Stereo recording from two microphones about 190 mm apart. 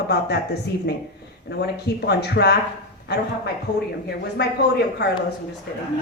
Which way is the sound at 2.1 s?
60° left (ahead or behind).